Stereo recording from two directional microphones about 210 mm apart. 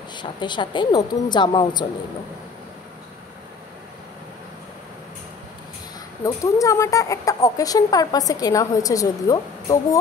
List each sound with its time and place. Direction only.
0.1 s a woman's voice: 20° left (ahead or behind)
6.2 s speech: 15° left (ahead or behind)